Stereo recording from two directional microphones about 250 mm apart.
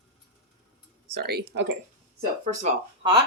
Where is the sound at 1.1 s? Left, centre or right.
Right.